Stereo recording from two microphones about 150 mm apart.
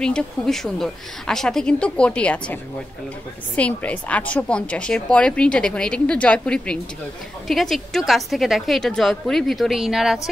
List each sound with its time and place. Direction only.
0.0 s a woman's voice: 5° left (ahead or behind)